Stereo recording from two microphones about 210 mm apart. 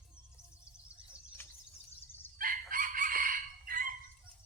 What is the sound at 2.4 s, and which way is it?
Crowing, 40° right (ahead or behind).